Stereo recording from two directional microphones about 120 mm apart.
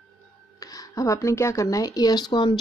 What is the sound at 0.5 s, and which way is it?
Speech, 30° left (ahead or behind).